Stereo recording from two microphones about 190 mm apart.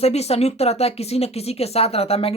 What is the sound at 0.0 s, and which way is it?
Speech, 35° left (ahead or behind).